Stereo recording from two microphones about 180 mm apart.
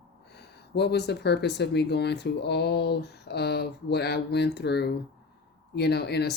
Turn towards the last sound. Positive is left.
turn(degrees=65)  # may be behind; listen again after turning